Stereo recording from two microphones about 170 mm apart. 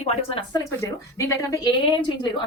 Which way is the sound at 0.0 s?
35° left (ahead or behind).